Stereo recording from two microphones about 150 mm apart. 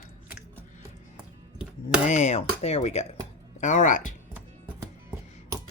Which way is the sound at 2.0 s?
50° left (ahead or behind).